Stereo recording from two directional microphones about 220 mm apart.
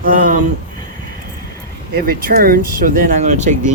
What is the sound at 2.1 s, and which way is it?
Speech, 40° right (ahead or behind).